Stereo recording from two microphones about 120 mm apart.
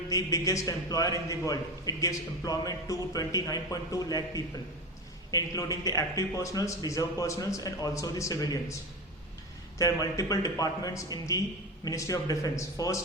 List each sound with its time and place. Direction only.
0.1 s a man's voice: 30° left (ahead or behind)
9.7 s a man's voice: 30° left (ahead or behind)